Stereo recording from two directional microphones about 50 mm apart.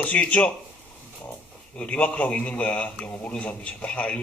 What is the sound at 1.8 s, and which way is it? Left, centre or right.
A man's voice, left.